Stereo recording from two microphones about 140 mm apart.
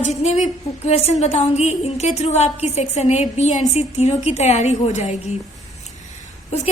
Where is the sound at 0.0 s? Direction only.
50° left (ahead or behind).